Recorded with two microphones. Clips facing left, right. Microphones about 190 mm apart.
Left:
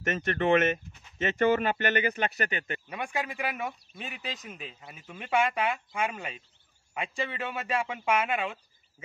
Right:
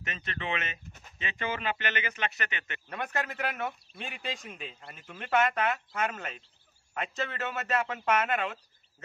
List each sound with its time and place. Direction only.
0.0 s speech: 50° left (ahead or behind)
2.9 s speech: 10° left (ahead or behind)